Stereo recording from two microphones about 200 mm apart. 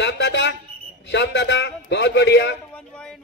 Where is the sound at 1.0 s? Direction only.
60° left (ahead or behind).